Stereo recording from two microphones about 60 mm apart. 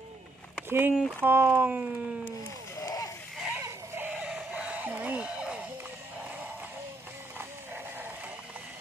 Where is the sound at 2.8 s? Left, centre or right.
Left.